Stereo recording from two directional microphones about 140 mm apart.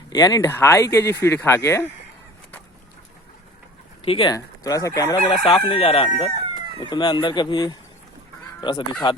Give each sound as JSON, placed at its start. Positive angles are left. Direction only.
{"t": 0.1, "sound": "speech", "side_deg": 25}
{"t": 4.0, "sound": "speech", "side_deg": 40}
{"t": 4.3, "sound": "speech", "side_deg": 25}
{"t": 5.5, "sound": "speech", "side_deg": 35}